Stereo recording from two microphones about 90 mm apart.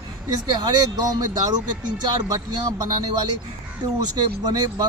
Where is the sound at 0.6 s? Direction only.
50° right (ahead or behind).